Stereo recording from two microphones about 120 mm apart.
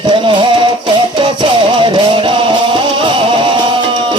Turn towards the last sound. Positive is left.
turn(degrees=-45)  # may be behind; listen again after turning